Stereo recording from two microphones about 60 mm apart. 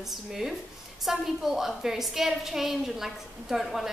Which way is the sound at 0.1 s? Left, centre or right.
Centre.